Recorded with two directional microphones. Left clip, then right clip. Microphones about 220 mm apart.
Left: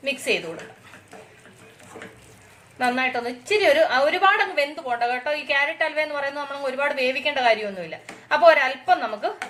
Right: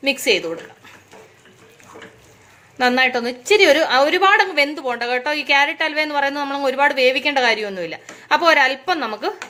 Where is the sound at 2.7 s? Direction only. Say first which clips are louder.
Right 6 dB; 50° right (ahead or behind).